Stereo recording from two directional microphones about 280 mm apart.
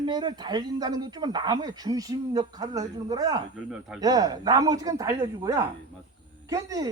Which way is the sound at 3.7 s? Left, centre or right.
Centre.